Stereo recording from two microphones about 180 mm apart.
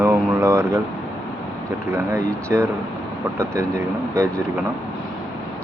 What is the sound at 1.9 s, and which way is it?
Speech, 15° right (ahead or behind).